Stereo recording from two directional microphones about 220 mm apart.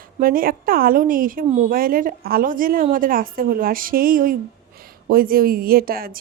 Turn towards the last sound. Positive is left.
turn(degrees=-40)  # may be behind; listen again after turning